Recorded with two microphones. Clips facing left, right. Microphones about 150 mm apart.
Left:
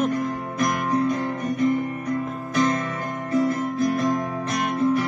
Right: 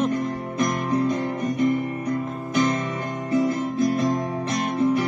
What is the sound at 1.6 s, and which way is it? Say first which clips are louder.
Guitar: even; 25° right (ahead or behind).